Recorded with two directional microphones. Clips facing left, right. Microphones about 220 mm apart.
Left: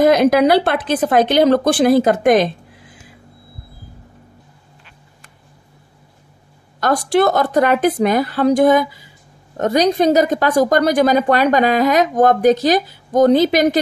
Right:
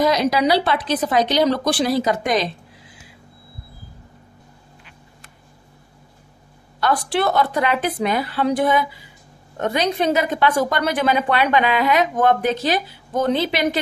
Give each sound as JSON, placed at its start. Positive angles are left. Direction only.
{"t": 0.0, "sound": "a woman's voice", "side_deg": 55}
{"t": 6.8, "sound": "a woman's voice", "side_deg": 45}